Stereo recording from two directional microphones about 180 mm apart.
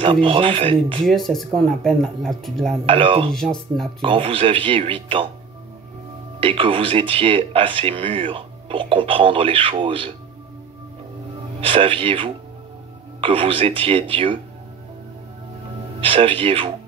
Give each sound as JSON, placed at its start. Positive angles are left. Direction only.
{"t": 0.0, "sound": "speech", "side_deg": -30}
{"t": 1.0, "sound": "speech", "side_deg": 0}
{"t": 2.9, "sound": "speech", "side_deg": -30}
{"t": 3.3, "sound": "speech", "side_deg": 0}
{"t": 4.0, "sound": "speech", "side_deg": -30}
{"t": 6.4, "sound": "speech", "side_deg": -30}
{"t": 11.6, "sound": "speech", "side_deg": -30}
{"t": 16.0, "sound": "speech", "side_deg": -30}